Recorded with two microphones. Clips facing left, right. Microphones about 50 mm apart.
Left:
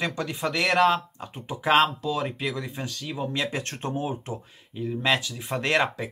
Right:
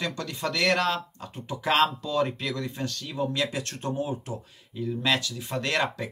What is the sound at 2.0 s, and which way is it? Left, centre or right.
Speech, centre.